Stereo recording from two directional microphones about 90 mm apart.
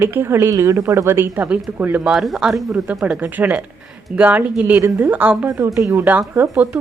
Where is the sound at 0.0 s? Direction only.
25° right (ahead or behind).